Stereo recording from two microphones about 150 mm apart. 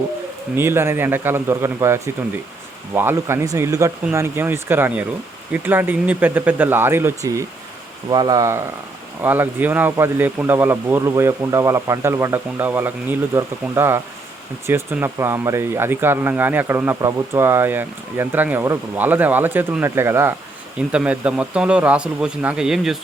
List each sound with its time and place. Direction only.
0.5 s speech: 15° right (ahead or behind)